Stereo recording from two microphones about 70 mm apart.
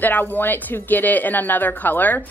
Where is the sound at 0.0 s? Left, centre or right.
Left.